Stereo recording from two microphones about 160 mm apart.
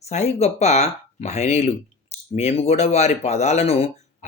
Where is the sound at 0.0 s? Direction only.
45° left (ahead or behind).